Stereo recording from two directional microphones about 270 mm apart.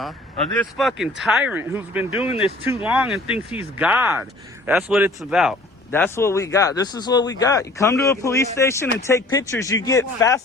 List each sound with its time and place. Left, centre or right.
0.6 s speech: centre
2.2 s speech: centre
2.6 s speech: centre
5.9 s speech: centre